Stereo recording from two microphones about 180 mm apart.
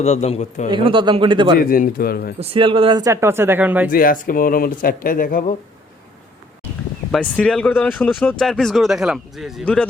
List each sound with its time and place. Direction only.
0.0 s a man's voice: 35° left (ahead or behind)
0.7 s speech: 25° right (ahead or behind)
1.5 s speech: 55° left (ahead or behind)
2.4 s speech: 30° right (ahead or behind); by 3.9 s 10° right (ahead or behind)
3.9 s speech: 50° left (ahead or behind)
7.1 s speech: 5° left (ahead or behind)